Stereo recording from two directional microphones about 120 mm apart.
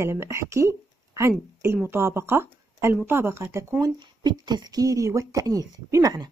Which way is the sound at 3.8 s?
35° right (ahead or behind).